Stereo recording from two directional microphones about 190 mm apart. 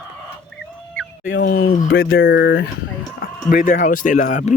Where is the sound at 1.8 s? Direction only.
90° left.